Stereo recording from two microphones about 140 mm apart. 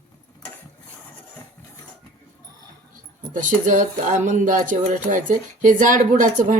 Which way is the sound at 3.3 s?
70° right (ahead or behind).